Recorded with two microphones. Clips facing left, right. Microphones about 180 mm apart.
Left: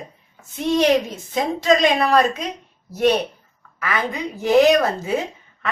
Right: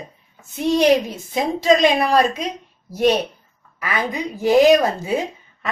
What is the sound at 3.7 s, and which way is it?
A woman's voice, 10° right (ahead or behind).